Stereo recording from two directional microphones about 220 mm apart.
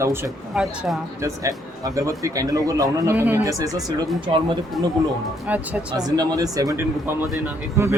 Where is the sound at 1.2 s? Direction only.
15° right (ahead or behind).